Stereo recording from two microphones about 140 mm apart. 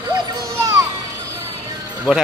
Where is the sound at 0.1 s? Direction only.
30° right (ahead or behind).